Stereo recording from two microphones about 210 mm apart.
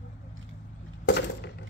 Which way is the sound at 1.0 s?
50° left (ahead or behind).